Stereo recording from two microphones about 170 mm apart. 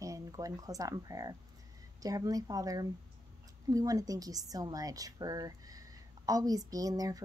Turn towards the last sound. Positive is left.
turn(degrees=-20)  # may be behind; listen again after turning